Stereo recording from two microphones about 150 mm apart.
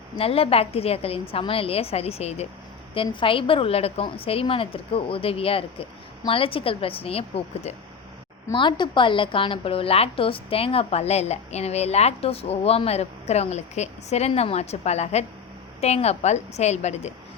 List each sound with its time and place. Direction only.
0.2 s a woman's voice: 40° left (ahead or behind)